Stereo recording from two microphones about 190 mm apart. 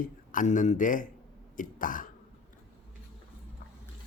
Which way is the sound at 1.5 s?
45° left (ahead or behind).